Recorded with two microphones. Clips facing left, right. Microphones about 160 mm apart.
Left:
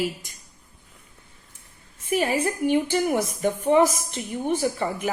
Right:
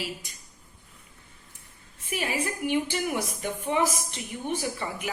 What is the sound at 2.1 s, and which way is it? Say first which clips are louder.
A woman's voice: left 7 dB; 50° left (ahead or behind).